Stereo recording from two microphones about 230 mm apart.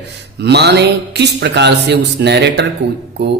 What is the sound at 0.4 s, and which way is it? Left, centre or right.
A man's voice, right.